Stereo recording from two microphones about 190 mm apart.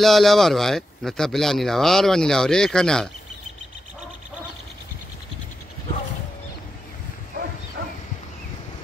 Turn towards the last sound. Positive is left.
turn(degrees=-60)  # may be behind; listen again after turning